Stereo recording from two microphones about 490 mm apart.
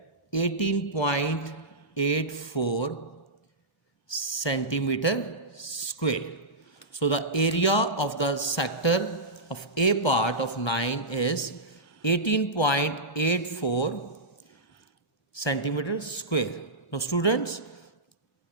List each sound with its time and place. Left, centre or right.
0.3 s a man's voice: left
4.1 s a man's voice: left
15.4 s a man's voice: left